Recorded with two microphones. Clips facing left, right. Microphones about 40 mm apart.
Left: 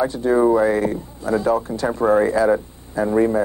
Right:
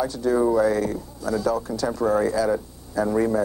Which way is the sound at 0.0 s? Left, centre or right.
Left.